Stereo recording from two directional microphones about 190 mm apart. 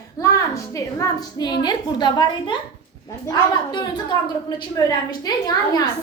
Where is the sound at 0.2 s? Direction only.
15° left (ahead or behind).